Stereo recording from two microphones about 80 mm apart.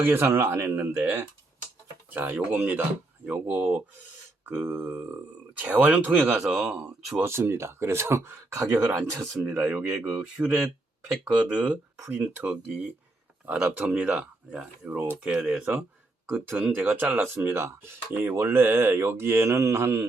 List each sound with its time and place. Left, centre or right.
0.0 s speech: right
2.0 s speech: right
3.2 s speech: centre
7.2 s speech: right
10.2 s speech: centre
12.1 s speech: right
13.6 s speech: centre; by 20.1 s right